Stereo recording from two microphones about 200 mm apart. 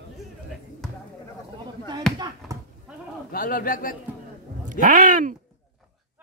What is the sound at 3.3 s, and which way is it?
Speech, 45° left (ahead or behind).